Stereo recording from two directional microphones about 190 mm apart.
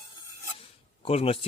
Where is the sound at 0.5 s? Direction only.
30° left (ahead or behind).